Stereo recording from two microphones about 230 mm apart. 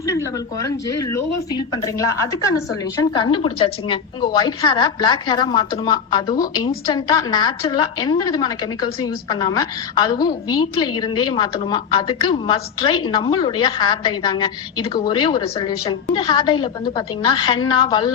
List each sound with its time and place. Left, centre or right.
0.0 s a woman's voice: centre